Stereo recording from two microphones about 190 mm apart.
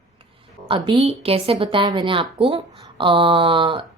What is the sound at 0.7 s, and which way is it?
A woman's voice, 25° right (ahead or behind).